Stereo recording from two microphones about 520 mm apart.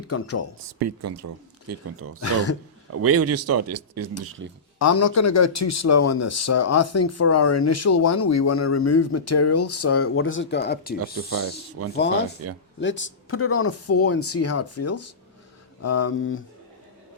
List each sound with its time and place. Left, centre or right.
0.1 s speech: left
0.8 s speech: right
4.8 s speech: left
11.0 s speech: right
12.8 s speech: left